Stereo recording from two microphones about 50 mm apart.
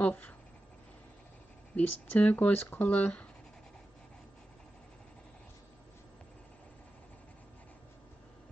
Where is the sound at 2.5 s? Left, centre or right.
Left.